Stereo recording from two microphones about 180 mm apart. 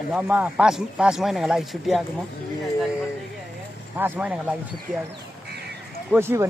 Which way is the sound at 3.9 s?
10° right (ahead or behind).